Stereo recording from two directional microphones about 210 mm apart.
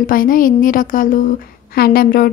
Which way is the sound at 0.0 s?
40° left (ahead or behind).